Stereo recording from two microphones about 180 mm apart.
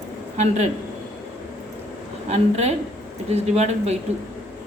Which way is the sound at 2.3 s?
40° right (ahead or behind).